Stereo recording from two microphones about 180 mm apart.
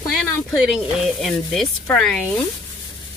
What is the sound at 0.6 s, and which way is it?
Speech, centre (ahead or behind).